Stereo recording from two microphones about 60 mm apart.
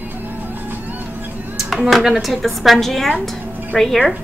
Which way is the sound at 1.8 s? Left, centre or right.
Centre.